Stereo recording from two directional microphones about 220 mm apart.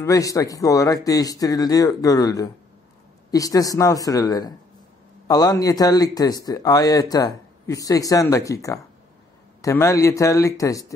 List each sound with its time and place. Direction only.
0.0 s speech: 15° left (ahead or behind)